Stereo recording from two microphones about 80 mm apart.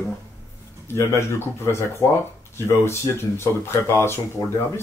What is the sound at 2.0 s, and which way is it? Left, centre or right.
Speech, left.